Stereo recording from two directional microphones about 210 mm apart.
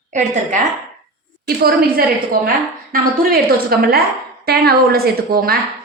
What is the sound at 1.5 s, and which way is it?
A woman's voice, 45° right (ahead or behind).